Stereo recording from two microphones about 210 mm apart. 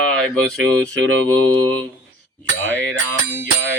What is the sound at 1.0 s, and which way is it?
Mantra, 85° right.